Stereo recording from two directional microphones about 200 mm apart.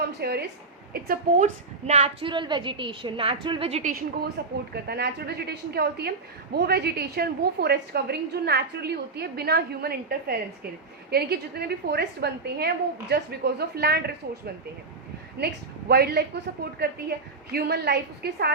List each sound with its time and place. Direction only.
0.2 s a woman's voice: 55° right (ahead or behind)
1.9 s a woman's voice: 30° right (ahead or behind)
4.4 s a woman's voice: 55° right (ahead or behind)